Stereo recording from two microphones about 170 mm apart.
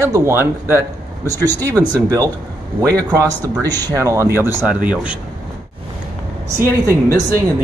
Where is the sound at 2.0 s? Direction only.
20° right (ahead or behind).